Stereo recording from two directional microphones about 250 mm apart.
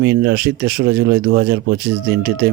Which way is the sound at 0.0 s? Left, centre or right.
Right.